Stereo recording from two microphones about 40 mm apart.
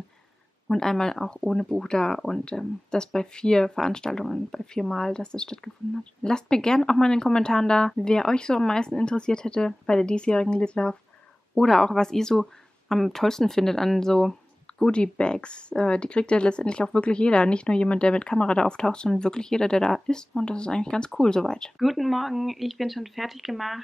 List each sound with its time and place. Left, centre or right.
0.7 s speech: centre
11.5 s speech: centre
14.9 s speech: left
21.7 s speech: centre